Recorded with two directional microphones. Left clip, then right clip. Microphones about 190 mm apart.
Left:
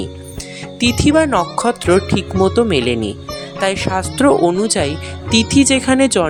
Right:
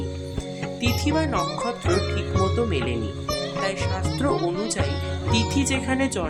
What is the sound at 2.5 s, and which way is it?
Speech, 45° left (ahead or behind).